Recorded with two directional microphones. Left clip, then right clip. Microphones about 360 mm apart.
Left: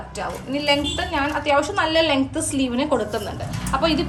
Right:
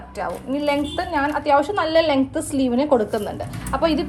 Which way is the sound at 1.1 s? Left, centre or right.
Centre.